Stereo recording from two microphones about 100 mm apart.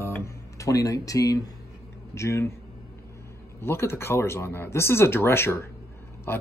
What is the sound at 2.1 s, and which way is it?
Speech, 30° left (ahead or behind).